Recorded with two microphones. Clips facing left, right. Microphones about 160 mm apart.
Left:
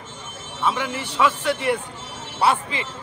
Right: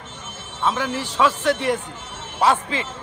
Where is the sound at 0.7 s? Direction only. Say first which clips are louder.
Right 1 dB; 15° left (ahead or behind).